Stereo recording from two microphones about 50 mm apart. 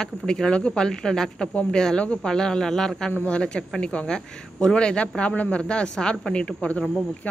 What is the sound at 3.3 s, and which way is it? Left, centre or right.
Speech, left.